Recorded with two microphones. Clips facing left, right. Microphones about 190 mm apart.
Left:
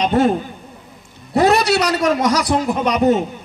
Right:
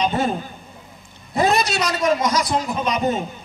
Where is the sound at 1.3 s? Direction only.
70° left (ahead or behind).